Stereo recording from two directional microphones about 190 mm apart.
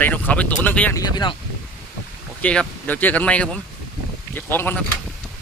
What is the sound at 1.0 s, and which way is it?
Speech, 25° left (ahead or behind).